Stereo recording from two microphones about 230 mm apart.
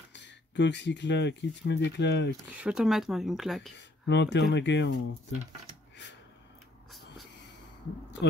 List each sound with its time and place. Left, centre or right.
0.1 s speech: left
2.5 s speech: centre
3.7 s speech: left